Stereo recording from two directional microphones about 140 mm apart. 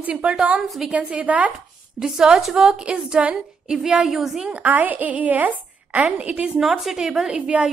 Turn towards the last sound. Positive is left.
turn(degrees=-5)  # may be behind; listen again after turning